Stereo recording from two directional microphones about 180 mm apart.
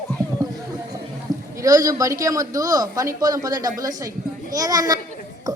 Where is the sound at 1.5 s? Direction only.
20° right (ahead or behind).